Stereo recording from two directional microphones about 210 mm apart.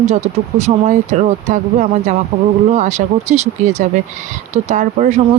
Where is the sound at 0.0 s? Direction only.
30° right (ahead or behind).